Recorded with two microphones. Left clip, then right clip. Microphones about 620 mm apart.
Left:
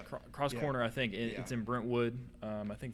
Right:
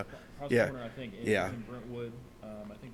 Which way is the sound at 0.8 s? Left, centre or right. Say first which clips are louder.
Left 8 dB; left.